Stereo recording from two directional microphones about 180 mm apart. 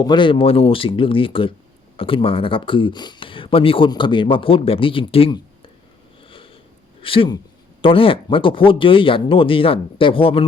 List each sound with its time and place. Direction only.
0.0 s speech: 25° left (ahead or behind)
6.2 s sniff: 30° left (ahead or behind)
7.0 s speech: 30° left (ahead or behind)